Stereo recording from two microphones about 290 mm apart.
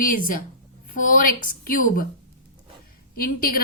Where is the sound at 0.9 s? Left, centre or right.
Left.